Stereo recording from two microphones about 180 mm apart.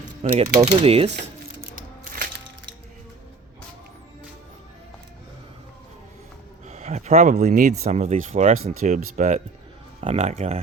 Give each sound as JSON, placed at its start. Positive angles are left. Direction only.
{"t": 0.2, "sound": "speech", "side_deg": -35}
{"t": 6.7, "sound": "speech", "side_deg": -40}